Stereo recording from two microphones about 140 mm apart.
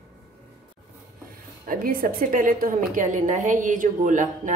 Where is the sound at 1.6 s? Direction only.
90° right.